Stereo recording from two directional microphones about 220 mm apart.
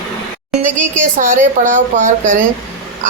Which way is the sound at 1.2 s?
35° right (ahead or behind).